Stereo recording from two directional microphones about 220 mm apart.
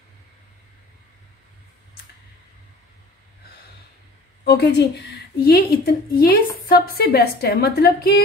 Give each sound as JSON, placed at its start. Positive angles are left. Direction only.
{"t": 4.5, "sound": "a woman's voice", "side_deg": 50}